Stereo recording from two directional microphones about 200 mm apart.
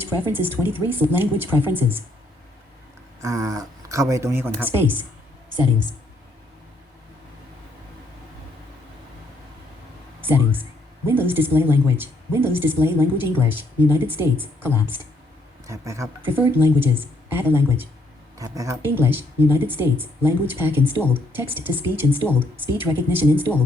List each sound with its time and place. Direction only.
0.0 s speech: 10° right (ahead or behind)
3.2 s speech: 15° right (ahead or behind)
10.2 s a woman's voice: 10° right (ahead or behind)